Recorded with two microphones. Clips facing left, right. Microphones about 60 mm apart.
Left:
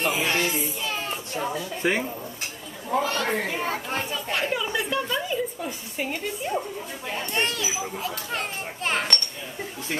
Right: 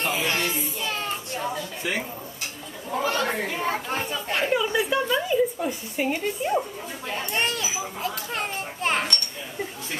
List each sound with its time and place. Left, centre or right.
0.0 s children playing: centre
1.8 s speech: left
3.0 s speech: centre